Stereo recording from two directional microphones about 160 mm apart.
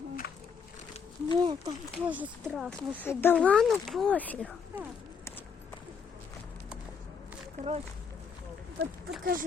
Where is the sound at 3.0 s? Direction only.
15° left (ahead or behind).